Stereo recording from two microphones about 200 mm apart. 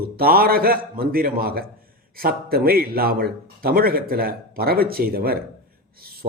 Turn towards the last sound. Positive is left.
turn(degrees=-50)  # may be behind; listen again after turning